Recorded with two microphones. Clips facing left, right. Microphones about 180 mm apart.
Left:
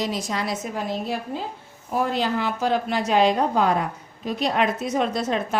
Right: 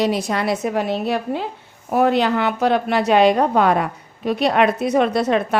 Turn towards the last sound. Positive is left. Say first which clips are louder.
# right 6 dB
turn(degrees=-65)  # may be behind; listen again after turning